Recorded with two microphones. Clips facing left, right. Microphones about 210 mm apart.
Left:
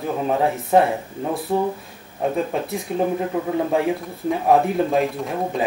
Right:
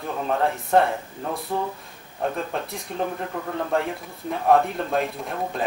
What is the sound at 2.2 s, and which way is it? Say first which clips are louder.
Speech: left 5 dB; 5° left (ahead or behind).